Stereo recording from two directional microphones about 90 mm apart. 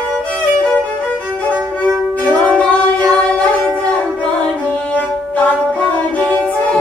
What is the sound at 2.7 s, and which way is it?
Music, 15° left (ahead or behind).